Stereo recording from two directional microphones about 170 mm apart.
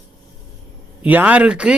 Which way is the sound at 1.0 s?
10° right (ahead or behind).